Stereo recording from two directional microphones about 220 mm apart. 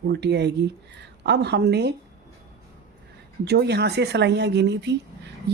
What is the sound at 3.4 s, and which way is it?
A woman's voice, 50° right (ahead or behind).